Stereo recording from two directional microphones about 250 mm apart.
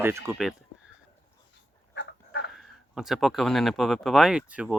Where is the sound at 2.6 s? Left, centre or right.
Centre.